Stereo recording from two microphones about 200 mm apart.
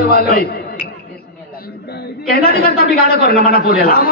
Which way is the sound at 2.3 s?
50° left (ahead or behind).